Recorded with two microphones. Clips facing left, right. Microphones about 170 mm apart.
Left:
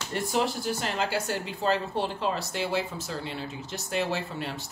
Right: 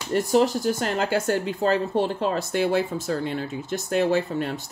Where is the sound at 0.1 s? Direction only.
40° right (ahead or behind).